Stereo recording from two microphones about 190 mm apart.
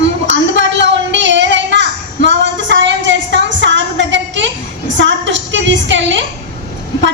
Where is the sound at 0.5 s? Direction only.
70° right (ahead or behind).